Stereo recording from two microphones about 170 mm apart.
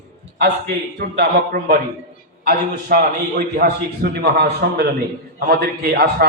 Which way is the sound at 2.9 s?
60° right (ahead or behind).